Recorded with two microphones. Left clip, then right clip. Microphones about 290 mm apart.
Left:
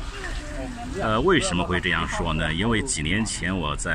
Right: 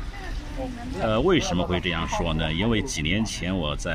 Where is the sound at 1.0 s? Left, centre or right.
Centre.